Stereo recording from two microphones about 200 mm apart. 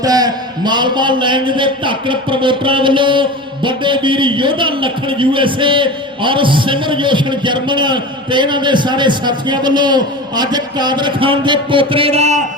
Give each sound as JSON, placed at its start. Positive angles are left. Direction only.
{"t": 0.0, "sound": "a man's voice", "side_deg": -20}